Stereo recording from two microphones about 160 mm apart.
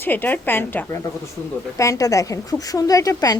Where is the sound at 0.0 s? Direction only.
10° left (ahead or behind).